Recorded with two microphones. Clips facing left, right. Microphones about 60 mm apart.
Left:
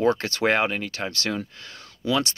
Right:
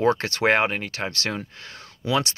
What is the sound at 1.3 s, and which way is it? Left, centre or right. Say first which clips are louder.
Speech: left 2 dB; right.